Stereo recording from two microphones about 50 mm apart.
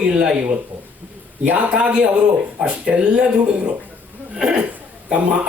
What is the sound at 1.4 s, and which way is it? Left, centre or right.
Speech, right.